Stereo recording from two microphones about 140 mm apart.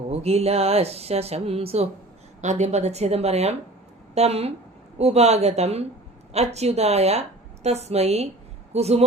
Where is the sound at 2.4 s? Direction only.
55° right (ahead or behind).